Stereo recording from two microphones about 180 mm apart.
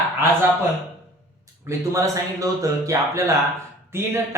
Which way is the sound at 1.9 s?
15° right (ahead or behind).